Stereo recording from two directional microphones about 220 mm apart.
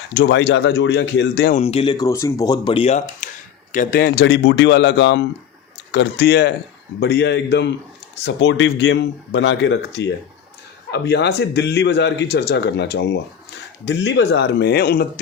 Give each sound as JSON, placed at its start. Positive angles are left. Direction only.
{"t": 0.2, "sound": "speech", "side_deg": 50}
{"t": 1.5, "sound": "speech", "side_deg": 25}
{"t": 4.0, "sound": "speech", "side_deg": 50}